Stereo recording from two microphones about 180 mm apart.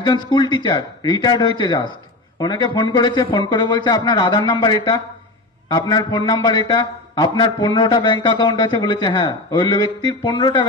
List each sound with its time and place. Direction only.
0.0 s a man's voice: 25° left (ahead or behind)